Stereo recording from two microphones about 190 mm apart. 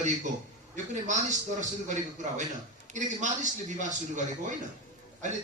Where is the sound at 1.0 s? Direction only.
40° right (ahead or behind).